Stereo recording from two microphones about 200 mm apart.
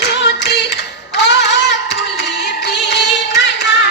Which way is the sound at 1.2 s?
60° left (ahead or behind).